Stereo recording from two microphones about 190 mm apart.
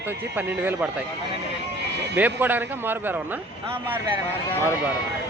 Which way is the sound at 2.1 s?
10° right (ahead or behind).